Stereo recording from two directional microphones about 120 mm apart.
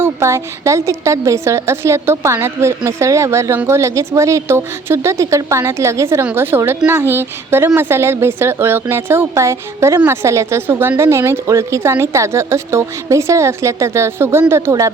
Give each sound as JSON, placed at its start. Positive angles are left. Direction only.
{"t": 0.0, "sound": "a woman's voice", "side_deg": -25}